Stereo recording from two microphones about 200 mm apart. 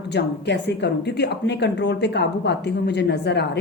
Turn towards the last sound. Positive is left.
turn(degrees=60)  # may be behind; listen again after turning